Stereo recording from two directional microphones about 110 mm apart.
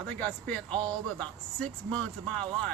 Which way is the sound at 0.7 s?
40° right (ahead or behind).